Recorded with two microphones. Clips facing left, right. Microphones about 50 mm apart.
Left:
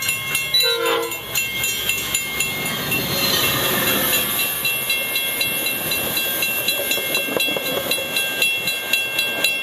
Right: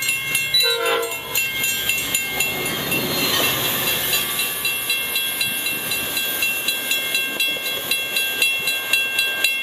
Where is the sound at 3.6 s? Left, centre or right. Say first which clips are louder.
Left 3 dB; left.